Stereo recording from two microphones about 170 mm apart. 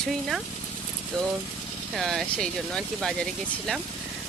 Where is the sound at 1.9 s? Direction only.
Centre (ahead or behind).